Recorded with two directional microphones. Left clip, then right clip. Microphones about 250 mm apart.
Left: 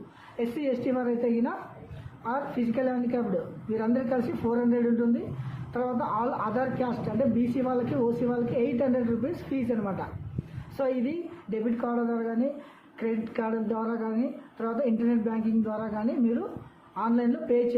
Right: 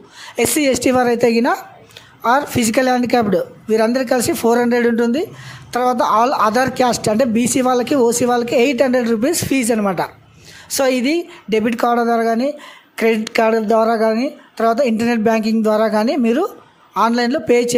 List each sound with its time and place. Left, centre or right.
0.3 s a woman's voice: right
10.8 s a woman's voice: right